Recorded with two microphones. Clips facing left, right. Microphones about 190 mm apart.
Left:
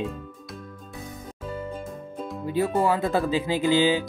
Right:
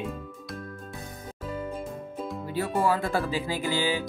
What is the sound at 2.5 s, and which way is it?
Speech, 20° left (ahead or behind).